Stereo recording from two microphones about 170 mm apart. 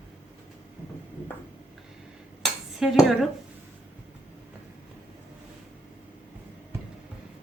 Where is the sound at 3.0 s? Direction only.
Centre (ahead or behind).